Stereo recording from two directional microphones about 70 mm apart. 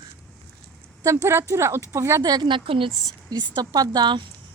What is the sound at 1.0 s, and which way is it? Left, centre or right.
Speech, right.